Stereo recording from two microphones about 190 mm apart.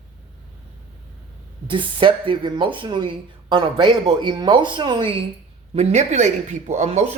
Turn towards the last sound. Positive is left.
turn(degrees=-35)  # may be behind; listen again after turning